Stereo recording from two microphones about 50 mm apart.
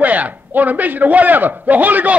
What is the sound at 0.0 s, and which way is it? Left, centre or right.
A man's voice, right.